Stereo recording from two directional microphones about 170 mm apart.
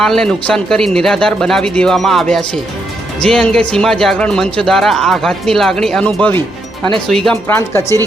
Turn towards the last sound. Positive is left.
turn(degrees=15)  # may be behind; listen again after turning